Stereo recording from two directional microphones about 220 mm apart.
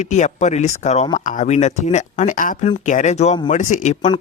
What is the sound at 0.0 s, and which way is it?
A man's voice, 30° left (ahead or behind).